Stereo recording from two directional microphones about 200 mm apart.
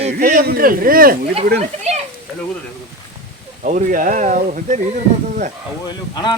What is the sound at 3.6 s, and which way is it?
Speech, 40° right (ahead or behind).